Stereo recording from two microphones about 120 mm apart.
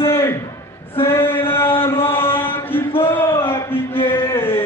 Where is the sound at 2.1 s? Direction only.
20° left (ahead or behind).